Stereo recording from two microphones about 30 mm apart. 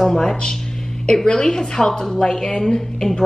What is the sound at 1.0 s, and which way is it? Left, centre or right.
A woman's voice, left.